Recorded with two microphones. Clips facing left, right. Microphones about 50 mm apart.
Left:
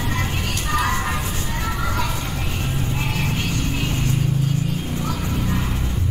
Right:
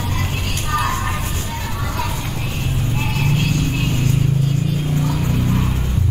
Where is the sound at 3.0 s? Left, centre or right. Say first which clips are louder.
Right 6 dB; right.